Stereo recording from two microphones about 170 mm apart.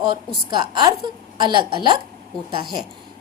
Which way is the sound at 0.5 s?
25° right (ahead or behind).